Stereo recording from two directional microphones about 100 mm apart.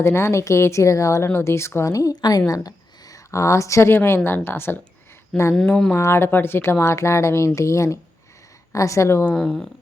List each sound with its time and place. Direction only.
0.0 s speech: 25° left (ahead or behind)
5.3 s speech: 5° left (ahead or behind)
5.9 s speech: 25° left (ahead or behind)
9.3 s speech: 10° left (ahead or behind)